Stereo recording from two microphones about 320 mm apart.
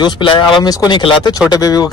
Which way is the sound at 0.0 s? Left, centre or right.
Centre.